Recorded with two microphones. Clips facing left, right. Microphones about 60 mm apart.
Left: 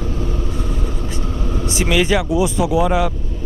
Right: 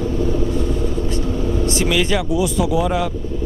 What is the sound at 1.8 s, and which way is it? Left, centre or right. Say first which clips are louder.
Speech: left 5 dB; centre.